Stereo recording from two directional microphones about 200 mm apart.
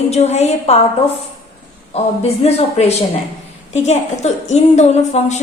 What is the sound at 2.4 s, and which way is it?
A woman's voice, 30° left (ahead or behind).